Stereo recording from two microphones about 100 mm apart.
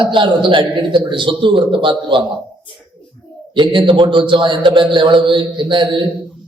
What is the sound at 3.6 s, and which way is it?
A man's voice, 55° right (ahead or behind).